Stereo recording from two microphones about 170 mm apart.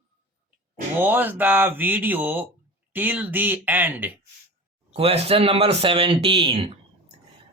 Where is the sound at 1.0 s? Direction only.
10° right (ahead or behind).